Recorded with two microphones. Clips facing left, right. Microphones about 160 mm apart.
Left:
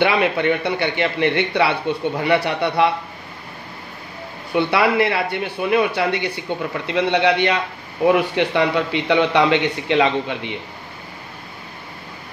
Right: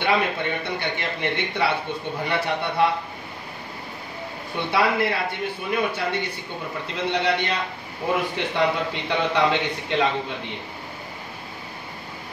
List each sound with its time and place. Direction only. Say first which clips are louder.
0.0 s speech: left 5 dB; 75° left (ahead or behind)
4.6 s a man's voice: left 5 dB; 70° left (ahead or behind)